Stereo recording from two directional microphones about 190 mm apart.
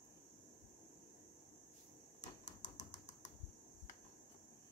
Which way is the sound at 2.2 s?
40° left (ahead or behind).